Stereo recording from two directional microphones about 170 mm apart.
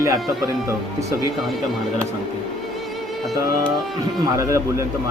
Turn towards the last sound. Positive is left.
turn(degrees=-20)  # may be behind; listen again after turning